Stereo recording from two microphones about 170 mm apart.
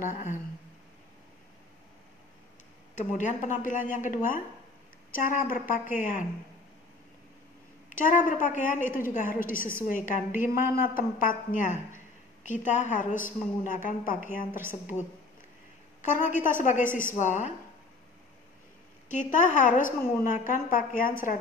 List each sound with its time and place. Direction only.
0.1 s a woman's voice: 50° left (ahead or behind)
3.0 s a woman's voice: 45° left (ahead or behind)
7.9 s a woman's voice: 50° left (ahead or behind)
14.5 s a woman's voice: 15° right (ahead or behind)
16.1 s a woman's voice: 50° left (ahead or behind)
19.0 s a woman's voice: 50° left (ahead or behind)